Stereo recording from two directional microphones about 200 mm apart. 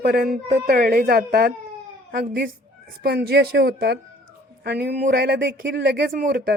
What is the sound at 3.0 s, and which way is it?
Speech, 50° right (ahead or behind).